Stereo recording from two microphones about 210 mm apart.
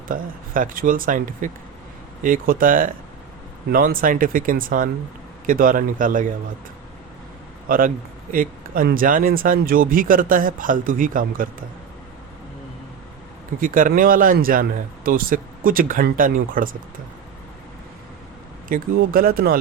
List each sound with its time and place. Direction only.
0.1 s speech: 40° right (ahead or behind)
7.7 s speech: 40° right (ahead or behind)
13.6 s speech: 40° right (ahead or behind)
18.7 s speech: 45° right (ahead or behind)